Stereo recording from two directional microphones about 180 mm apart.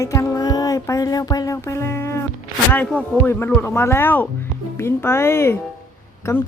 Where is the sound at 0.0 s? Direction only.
15° left (ahead or behind).